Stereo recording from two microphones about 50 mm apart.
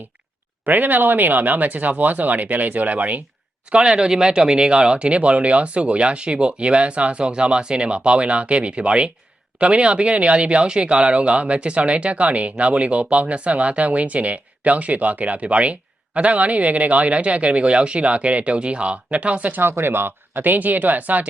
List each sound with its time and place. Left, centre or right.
0.6 s speech: right
3.7 s speech: centre
19.6 s speech: right